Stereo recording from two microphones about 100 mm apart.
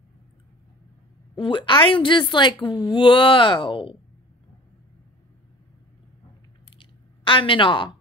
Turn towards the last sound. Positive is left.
turn(degrees=55)  # may be behind; listen again after turning